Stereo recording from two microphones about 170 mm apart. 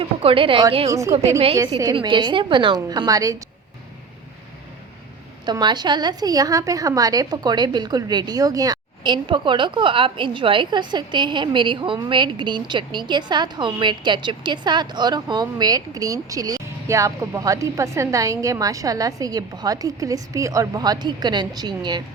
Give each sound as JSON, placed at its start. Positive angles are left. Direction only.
{"t": 0.0, "sound": "a woman's voice", "side_deg": -35}
{"t": 0.9, "sound": "a woman's voice", "side_deg": -20}
{"t": 5.5, "sound": "a woman's voice", "side_deg": -25}